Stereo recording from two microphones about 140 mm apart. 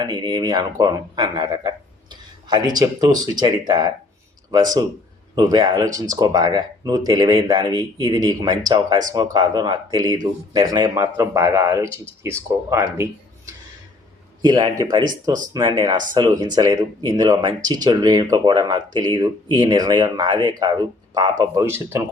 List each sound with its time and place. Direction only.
0.0 s speech: 30° right (ahead or behind)